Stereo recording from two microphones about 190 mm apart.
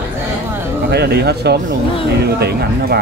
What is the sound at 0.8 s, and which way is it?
Speech, 60° right (ahead or behind).